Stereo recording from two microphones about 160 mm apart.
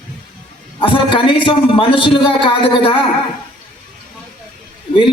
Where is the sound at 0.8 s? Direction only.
30° left (ahead or behind).